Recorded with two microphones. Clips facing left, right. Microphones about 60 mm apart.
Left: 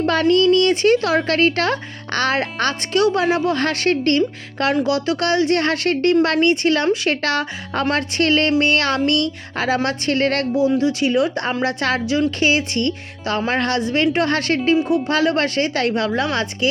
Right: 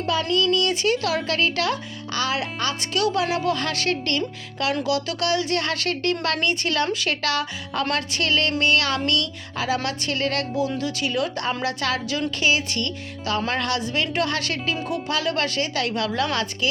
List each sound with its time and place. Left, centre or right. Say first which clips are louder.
0.0 s a woman's voice: left 7 dB; left
3.0 s a woman's voice: left 5 dB; left